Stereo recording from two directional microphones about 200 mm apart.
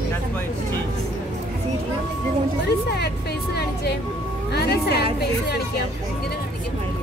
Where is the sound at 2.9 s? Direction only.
55° left (ahead or behind).